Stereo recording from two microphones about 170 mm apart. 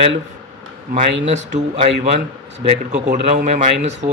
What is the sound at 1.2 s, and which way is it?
Speech, 45° right (ahead or behind).